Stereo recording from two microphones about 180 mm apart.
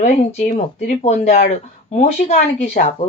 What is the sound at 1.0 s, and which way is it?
Speech, 35° left (ahead or behind).